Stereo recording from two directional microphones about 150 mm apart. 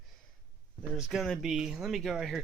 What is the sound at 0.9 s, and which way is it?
Speech, 5° right (ahead or behind).